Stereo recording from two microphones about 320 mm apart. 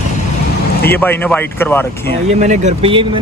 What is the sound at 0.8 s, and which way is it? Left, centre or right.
Speech, centre.